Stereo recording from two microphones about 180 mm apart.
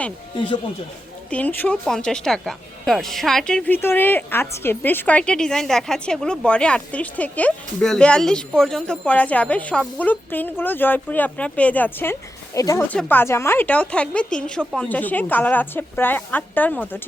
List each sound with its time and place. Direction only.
0.3 s speech: 25° left (ahead or behind)
1.3 s speech: 10° left (ahead or behind)